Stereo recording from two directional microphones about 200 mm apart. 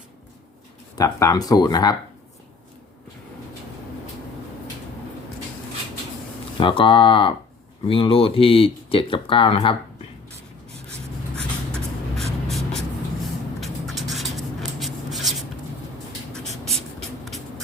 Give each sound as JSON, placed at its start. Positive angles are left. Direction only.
{"t": 0.9, "sound": "speech", "side_deg": 15}
{"t": 6.6, "sound": "speech", "side_deg": 25}
{"t": 11.7, "sound": "vehicle", "side_deg": 0}
{"t": 13.6, "sound": "rub", "side_deg": 0}
{"t": 16.3, "sound": "writing", "side_deg": 5}
{"t": 17.0, "sound": "shuffle", "side_deg": 0}